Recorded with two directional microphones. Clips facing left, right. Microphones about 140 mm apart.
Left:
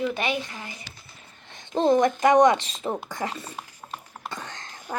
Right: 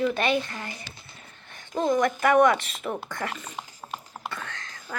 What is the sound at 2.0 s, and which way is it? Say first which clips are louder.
Speech: left 3 dB; 15° left (ahead or behind).